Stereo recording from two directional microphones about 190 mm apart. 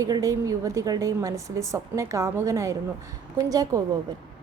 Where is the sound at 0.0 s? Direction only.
15° right (ahead or behind).